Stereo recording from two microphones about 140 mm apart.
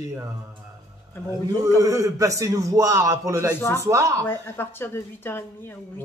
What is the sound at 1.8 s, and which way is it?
Speech, 25° right (ahead or behind).